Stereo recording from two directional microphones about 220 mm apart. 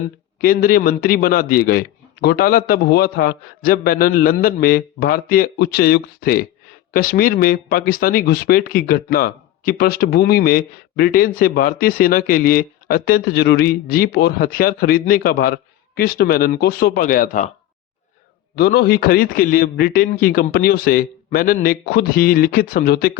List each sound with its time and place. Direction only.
0.4 s speech: 40° left (ahead or behind)
18.5 s speech: 45° left (ahead or behind)